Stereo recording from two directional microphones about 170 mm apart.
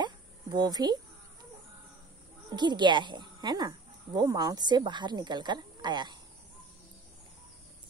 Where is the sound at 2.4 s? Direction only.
25° right (ahead or behind).